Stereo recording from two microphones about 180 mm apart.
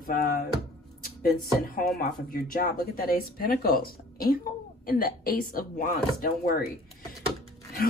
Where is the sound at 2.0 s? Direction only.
55° left (ahead or behind).